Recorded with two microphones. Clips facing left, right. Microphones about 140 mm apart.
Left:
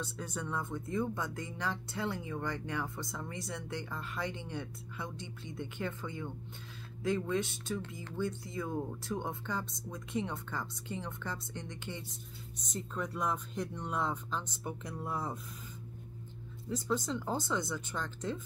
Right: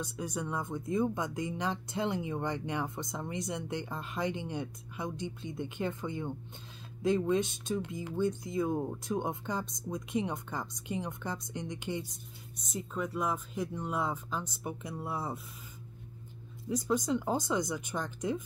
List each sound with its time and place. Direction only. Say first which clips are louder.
0.0 s speech: right 3 dB; 15° right (ahead or behind)
16.6 s speech: right 4 dB; 15° right (ahead or behind)